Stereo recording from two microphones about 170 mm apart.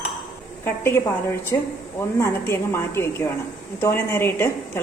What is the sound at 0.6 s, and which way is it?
Speech, 15° left (ahead or behind).